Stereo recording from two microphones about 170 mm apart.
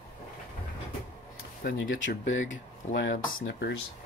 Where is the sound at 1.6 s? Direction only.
80° left.